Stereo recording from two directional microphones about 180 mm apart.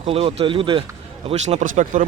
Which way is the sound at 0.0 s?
30° right (ahead or behind).